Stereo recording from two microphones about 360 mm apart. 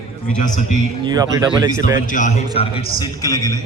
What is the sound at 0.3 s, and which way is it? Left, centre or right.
Speech, left.